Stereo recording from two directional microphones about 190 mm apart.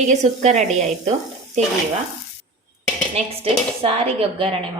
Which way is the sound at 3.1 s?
30° right (ahead or behind).